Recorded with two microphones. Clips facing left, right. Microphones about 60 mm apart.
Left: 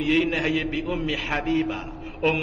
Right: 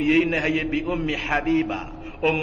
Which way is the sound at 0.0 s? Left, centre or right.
Right.